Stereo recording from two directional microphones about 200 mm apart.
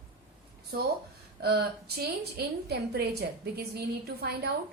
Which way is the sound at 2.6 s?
55° right (ahead or behind).